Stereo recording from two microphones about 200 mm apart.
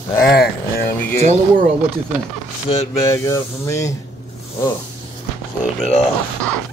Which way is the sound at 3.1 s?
15° left (ahead or behind).